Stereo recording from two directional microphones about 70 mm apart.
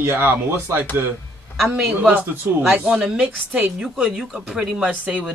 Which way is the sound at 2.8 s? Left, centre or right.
Centre.